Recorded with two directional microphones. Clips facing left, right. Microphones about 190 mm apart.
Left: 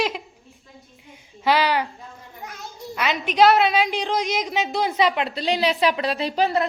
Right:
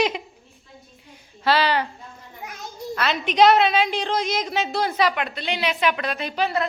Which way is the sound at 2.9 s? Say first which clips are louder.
Even; 15° left (ahead or behind).